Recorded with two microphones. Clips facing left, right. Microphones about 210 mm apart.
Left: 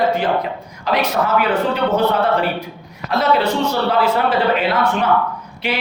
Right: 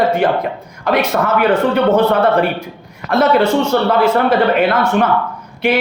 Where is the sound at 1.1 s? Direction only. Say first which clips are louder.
Right 3 dB; 45° right (ahead or behind).